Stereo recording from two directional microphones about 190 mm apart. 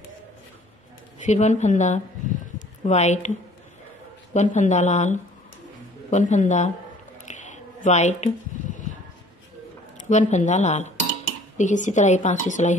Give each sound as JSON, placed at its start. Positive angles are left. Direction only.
{"t": 1.2, "sound": "a woman's voice", "side_deg": 40}
{"t": 7.2, "sound": "a sound", "side_deg": 40}
{"t": 10.0, "sound": "a woman's voice", "side_deg": 40}